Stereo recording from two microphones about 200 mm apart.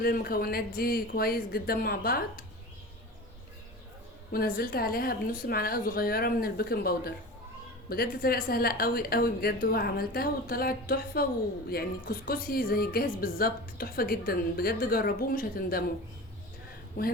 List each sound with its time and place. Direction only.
0.0 s a woman's voice: 50° left (ahead or behind)
4.3 s a woman's voice: 50° left (ahead or behind)